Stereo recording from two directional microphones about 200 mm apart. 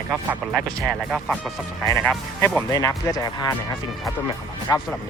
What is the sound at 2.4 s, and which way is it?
Speech, 15° left (ahead or behind).